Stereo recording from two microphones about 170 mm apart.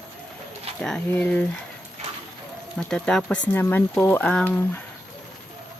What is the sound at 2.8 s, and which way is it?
Speech, 5° left (ahead or behind).